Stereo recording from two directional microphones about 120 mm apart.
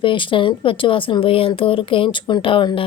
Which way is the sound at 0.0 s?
45° left (ahead or behind).